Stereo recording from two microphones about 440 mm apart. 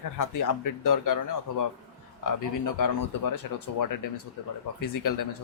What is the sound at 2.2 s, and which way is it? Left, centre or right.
Speech, left.